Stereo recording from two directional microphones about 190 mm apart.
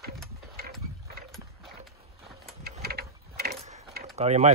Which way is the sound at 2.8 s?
55° right (ahead or behind).